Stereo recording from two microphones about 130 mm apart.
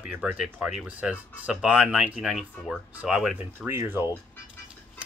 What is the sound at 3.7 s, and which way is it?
Speech, 20° right (ahead or behind).